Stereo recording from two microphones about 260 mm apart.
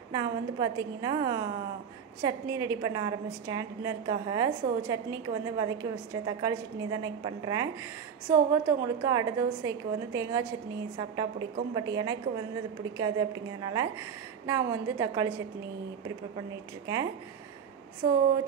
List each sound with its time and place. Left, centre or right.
0.1 s a woman's voice: centre
16.8 s a woman's voice: centre